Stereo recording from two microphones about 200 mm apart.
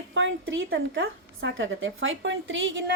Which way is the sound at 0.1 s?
70° right (ahead or behind).